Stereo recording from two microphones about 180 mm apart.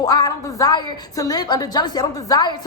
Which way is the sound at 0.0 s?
20° left (ahead or behind).